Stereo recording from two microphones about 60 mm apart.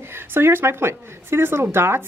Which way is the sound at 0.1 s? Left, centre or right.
Right.